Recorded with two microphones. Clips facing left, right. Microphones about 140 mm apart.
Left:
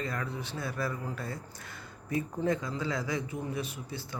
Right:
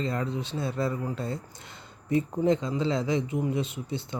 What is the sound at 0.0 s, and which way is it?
Speech, 25° right (ahead or behind).